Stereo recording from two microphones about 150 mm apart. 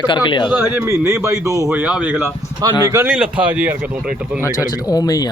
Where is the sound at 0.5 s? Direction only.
15° right (ahead or behind).